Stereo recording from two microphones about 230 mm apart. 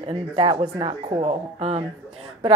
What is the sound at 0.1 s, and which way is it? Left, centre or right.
A woman's voice, right.